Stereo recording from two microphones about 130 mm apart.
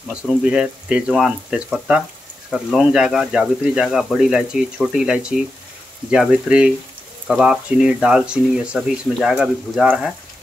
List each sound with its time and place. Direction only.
0.1 s speech: 10° right (ahead or behind)